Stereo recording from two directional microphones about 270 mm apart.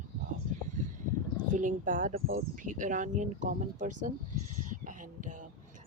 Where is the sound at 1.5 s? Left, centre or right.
Right.